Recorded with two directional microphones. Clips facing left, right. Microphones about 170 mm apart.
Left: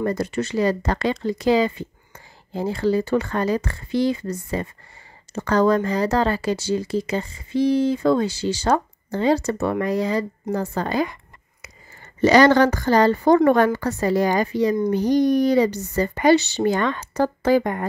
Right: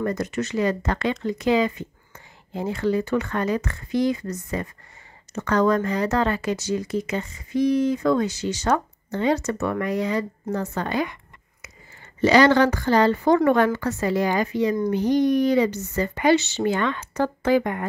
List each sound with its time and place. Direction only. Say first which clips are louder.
0.0 s a woman's voice: left 2 dB; 30° left (ahead or behind)